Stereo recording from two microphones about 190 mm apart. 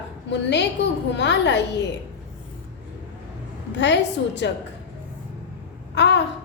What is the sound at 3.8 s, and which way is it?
Speech, 70° left (ahead or behind).